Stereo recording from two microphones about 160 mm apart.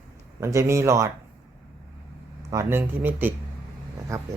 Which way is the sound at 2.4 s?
15° right (ahead or behind).